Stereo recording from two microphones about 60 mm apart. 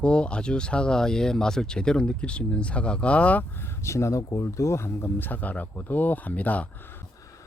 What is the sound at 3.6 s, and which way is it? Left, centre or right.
Speech, left.